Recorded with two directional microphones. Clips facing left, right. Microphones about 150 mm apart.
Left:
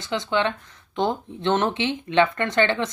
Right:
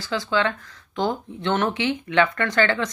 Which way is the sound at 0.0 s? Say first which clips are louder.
Even; 20° left (ahead or behind).